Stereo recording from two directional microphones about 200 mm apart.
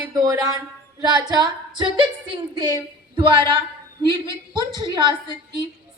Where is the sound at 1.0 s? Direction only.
20° right (ahead or behind).